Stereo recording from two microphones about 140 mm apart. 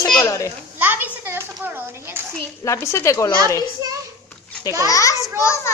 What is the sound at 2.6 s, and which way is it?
Speech, 20° left (ahead or behind).